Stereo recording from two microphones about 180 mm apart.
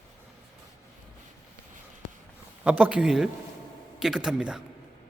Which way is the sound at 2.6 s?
5° right (ahead or behind).